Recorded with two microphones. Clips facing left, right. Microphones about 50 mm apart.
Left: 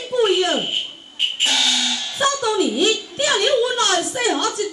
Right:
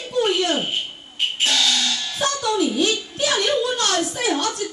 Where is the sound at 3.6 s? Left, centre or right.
Centre.